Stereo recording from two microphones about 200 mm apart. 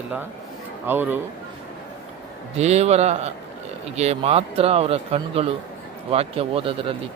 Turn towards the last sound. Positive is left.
turn(degrees=-25)  # may be behind; listen again after turning